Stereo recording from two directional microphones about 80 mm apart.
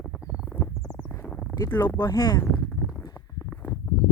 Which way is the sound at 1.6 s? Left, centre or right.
Left.